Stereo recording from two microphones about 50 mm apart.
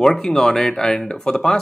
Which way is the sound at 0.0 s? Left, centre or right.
Centre.